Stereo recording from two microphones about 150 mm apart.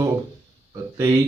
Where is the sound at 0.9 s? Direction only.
25° right (ahead or behind).